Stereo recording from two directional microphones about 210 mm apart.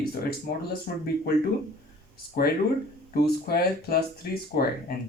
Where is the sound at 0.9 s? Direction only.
45° left (ahead or behind).